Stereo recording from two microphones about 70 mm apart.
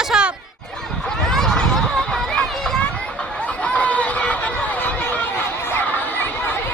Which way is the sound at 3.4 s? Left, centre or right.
Centre.